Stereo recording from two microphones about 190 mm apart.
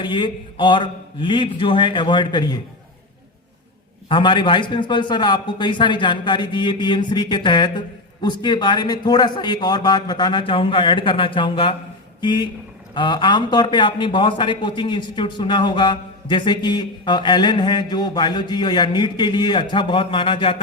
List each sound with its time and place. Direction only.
0.0 s a man's voice: 25° left (ahead or behind)
4.1 s a man's voice: 25° left (ahead or behind)